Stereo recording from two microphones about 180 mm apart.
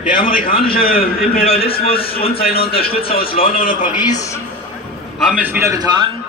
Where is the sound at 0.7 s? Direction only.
55° left (ahead or behind).